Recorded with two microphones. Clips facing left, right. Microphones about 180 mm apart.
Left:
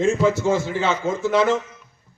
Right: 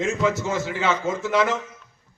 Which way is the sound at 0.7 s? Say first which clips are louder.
Left 2 dB; centre (ahead or behind).